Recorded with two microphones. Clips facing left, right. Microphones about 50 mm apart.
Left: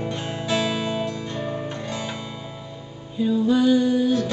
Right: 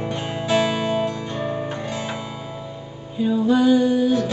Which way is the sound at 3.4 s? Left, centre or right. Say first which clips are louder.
Right 2 dB; centre.